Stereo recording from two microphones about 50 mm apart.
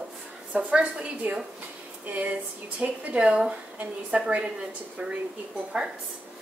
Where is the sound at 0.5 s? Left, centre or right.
Right.